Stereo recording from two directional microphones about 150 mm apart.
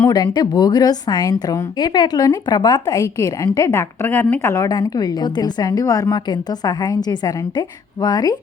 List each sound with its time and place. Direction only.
0.1 s a woman's voice: 25° left (ahead or behind)